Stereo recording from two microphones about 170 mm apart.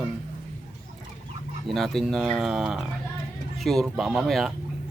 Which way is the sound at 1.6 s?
Centre (ahead or behind).